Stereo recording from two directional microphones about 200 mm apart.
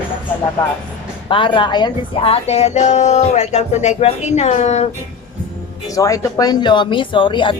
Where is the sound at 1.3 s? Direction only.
25° left (ahead or behind).